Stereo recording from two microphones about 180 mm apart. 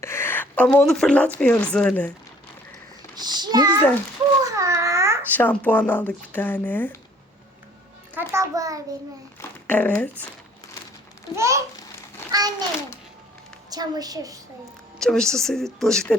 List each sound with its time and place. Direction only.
0.0 s speech: 15° left (ahead or behind)
3.2 s a sound: 25° right (ahead or behind)
4.5 s babbling: 15° right (ahead or behind)
5.3 s speech: 10° left (ahead or behind)
8.1 s a child's voice: 15° right (ahead or behind)
9.4 s a sound: 10° left (ahead or behind)
11.3 s a child's voice: 15° right (ahead or behind)
12.3 s a sound: 20° right (ahead or behind)
13.7 s a woman's voice: 20° right (ahead or behind)
14.9 s speech: 5° left (ahead or behind)